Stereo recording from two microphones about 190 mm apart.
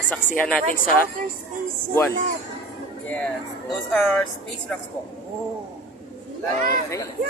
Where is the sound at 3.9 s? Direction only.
5° left (ahead or behind).